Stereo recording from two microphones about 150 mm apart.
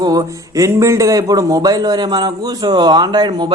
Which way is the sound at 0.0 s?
25° right (ahead or behind).